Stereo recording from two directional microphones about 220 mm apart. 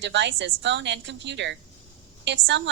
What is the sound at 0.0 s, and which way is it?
A woman's voice, 55° right (ahead or behind).